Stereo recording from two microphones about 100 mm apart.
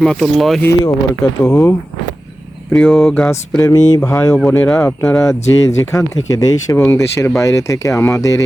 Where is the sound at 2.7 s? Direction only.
Centre (ahead or behind).